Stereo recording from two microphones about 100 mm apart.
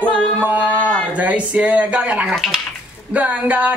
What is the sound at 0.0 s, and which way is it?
Music, 10° left (ahead or behind).